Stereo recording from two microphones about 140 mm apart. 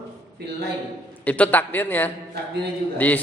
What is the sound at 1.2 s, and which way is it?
A man's voice, 10° left (ahead or behind).